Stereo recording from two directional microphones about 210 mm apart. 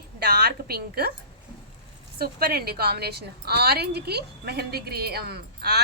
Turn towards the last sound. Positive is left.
turn(degrees=-50)  # may be behind; listen again after turning